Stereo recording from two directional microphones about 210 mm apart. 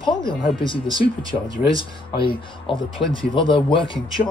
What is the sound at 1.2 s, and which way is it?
Speech, 20° right (ahead or behind).